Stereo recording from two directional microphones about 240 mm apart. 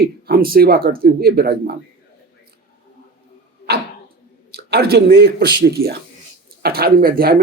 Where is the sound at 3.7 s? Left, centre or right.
Right.